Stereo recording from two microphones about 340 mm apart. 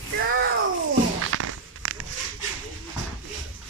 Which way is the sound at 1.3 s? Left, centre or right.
Right.